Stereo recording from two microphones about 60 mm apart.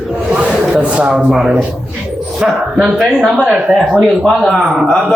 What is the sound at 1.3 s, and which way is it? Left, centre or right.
A man's voice, centre.